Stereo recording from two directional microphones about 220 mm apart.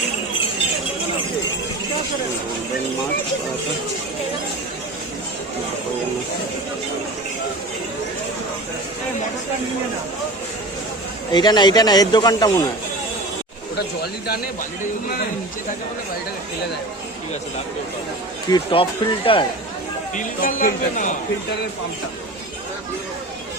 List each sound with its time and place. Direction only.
11.3 s speech: 20° left (ahead or behind)
18.5 s speech: 25° left (ahead or behind)
20.1 s speech: 40° left (ahead or behind)